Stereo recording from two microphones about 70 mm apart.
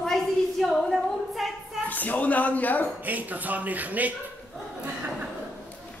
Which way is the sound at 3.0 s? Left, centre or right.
Right.